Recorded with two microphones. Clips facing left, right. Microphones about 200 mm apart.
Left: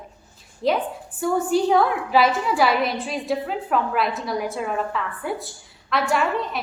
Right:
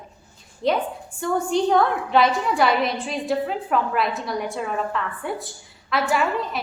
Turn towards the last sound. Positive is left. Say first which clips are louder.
# even
turn(degrees=0)  # may be behind; listen again after turning